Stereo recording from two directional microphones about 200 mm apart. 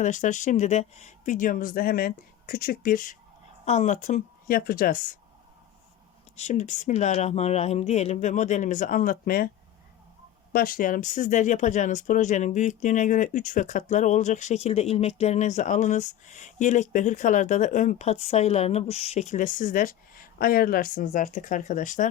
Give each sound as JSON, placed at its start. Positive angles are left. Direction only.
{"t": 0.0, "sound": "speech", "side_deg": 40}
{"t": 6.3, "sound": "speech", "side_deg": 35}
{"t": 10.5, "sound": "speech", "side_deg": 45}